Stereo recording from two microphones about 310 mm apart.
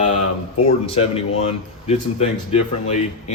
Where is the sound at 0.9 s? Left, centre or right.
Centre.